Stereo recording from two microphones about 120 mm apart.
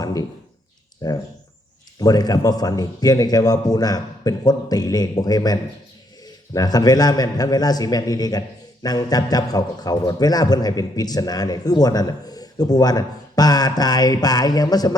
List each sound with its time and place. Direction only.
0.0 s a man's voice: 30° left (ahead or behind)